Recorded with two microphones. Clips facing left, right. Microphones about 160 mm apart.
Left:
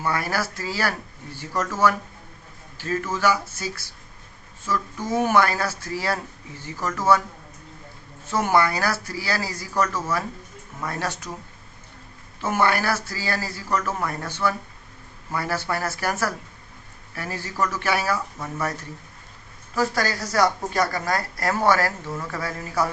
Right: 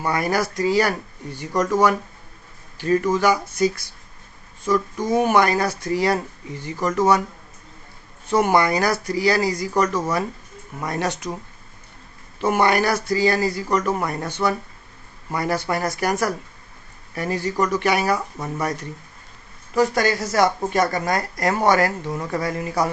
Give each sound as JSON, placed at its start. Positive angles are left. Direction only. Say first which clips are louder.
{"t": 0.0, "sound": "speech", "louder": "right 4 dB", "side_deg": -15}
{"t": 8.3, "sound": "speech", "louder": "right 3 dB", "side_deg": -15}
{"t": 12.4, "sound": "speech", "louder": "right 4 dB", "side_deg": -15}